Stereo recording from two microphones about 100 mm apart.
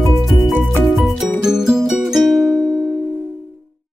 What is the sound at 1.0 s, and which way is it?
Music, 5° right (ahead or behind).